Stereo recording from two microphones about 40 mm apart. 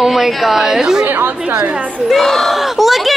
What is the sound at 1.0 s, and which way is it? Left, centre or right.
Speech, right.